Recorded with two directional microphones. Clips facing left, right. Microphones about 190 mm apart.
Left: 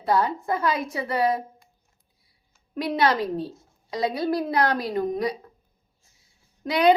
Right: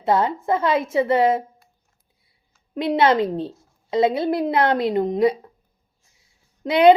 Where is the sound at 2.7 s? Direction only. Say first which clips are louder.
Right 5 dB; 25° right (ahead or behind).